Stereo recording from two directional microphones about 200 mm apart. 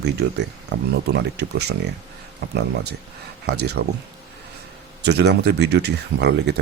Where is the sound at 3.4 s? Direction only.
55° right (ahead or behind).